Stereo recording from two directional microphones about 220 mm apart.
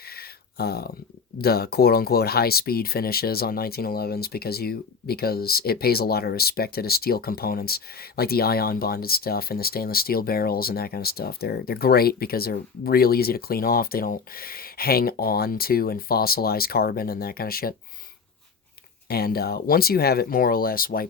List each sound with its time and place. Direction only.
0.2 s a sound: 45° left (ahead or behind)
1.4 s speech: 45° left (ahead or behind)
19.0 s speech: 45° left (ahead or behind)